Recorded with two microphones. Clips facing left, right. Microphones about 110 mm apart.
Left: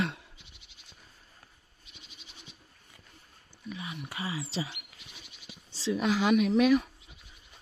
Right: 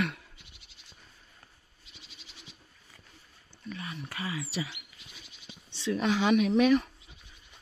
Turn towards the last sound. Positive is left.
turn(degrees=0)  # may be behind; listen again after turning